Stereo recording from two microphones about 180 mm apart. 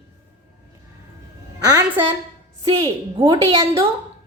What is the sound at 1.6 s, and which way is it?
A woman's voice, 20° right (ahead or behind).